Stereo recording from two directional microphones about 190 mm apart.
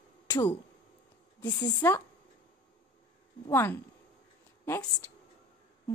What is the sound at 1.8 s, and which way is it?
Speech, 15° left (ahead or behind).